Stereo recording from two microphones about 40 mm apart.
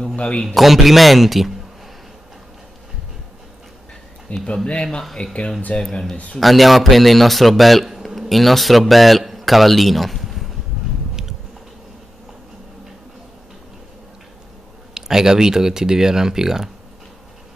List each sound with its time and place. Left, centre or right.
0.1 s a sound: left
0.6 s speech: centre
4.3 s speech: left
5.1 s speech: left
6.4 s speech: centre
15.0 s speech: centre